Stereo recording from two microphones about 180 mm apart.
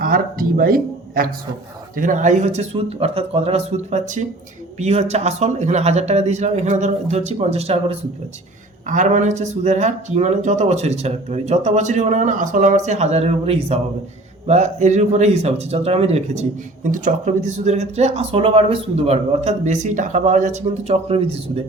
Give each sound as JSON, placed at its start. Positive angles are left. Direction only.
{"t": 0.0, "sound": "speech", "side_deg": -50}